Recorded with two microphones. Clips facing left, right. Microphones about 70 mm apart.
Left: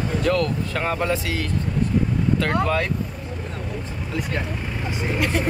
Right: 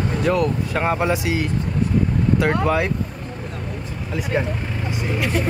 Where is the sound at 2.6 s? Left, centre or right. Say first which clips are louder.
Right 3 dB; centre.